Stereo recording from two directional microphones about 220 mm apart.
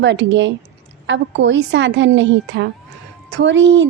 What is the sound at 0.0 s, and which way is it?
Speech, 55° right (ahead or behind).